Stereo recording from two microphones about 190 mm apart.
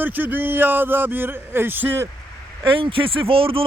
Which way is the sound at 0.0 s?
10° right (ahead or behind).